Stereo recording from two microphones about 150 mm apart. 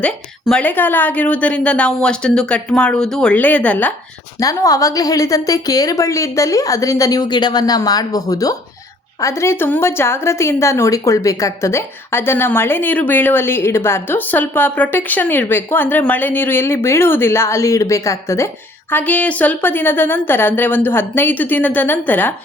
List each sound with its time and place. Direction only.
0.4 s a woman's voice: 10° left (ahead or behind)
4.4 s a woman's voice: 25° left (ahead or behind)